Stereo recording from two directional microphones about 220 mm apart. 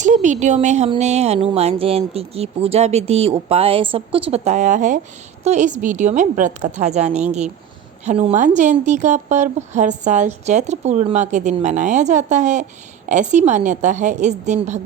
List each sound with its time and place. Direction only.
0.0 s a woman's voice: 35° right (ahead or behind)